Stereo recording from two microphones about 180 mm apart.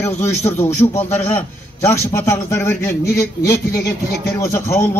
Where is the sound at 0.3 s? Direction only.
35° left (ahead or behind).